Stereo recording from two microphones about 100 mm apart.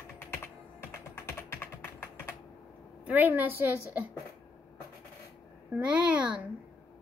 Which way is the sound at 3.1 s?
20° right (ahead or behind).